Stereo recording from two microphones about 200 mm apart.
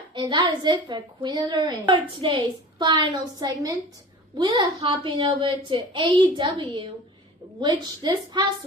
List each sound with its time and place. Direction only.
0.1 s a woman's voice: 25° right (ahead or behind)